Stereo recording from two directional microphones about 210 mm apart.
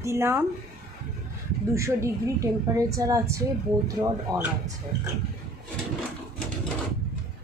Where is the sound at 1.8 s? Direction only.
15° right (ahead or behind).